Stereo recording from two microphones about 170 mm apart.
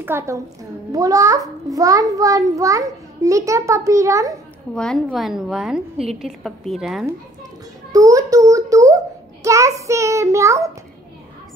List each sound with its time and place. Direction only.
0.0 s a woman's voice: 15° right (ahead or behind)
4.7 s a woman's voice: 5° left (ahead or behind)
7.9 s a sound: 20° right (ahead or behind)